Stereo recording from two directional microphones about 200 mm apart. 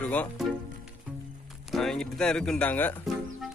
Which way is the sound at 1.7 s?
Centre (ahead or behind).